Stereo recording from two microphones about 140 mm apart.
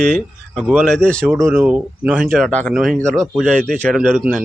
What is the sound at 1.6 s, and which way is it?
Speech, 10° right (ahead or behind).